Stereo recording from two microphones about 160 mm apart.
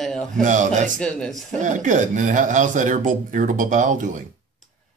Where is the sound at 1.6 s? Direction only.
50° right (ahead or behind).